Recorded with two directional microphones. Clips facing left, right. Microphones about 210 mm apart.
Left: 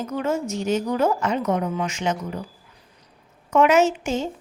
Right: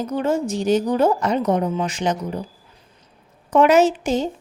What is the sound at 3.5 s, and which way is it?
Speech, 35° right (ahead or behind).